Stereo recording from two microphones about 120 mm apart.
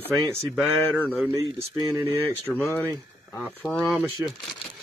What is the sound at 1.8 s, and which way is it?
Speech, 25° right (ahead or behind).